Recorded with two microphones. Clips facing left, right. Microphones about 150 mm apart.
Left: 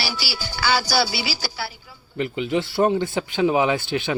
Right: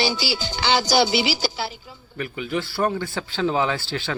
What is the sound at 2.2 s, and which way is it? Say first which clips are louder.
Speech: left 4 dB; 20° left (ahead or behind).